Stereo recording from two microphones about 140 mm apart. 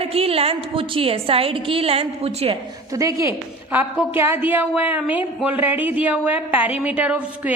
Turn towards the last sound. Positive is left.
turn(degrees=-10)  # may be behind; listen again after turning